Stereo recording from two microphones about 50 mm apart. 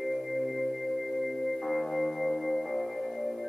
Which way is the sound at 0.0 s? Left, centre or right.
Centre.